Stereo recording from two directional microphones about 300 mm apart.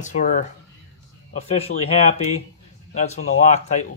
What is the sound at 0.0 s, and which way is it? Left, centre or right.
Speech, left.